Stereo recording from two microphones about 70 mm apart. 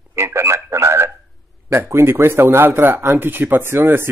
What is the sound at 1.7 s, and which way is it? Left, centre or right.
Speech, right.